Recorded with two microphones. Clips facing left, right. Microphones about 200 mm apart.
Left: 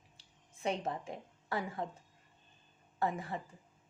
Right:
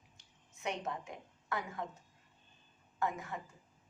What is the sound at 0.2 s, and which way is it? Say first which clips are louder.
A woman's voice: left 5 dB; 30° left (ahead or behind).